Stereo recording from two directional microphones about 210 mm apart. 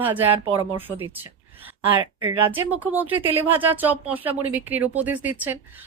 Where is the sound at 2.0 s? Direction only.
25° right (ahead or behind).